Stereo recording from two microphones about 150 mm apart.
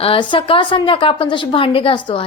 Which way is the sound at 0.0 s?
35° left (ahead or behind).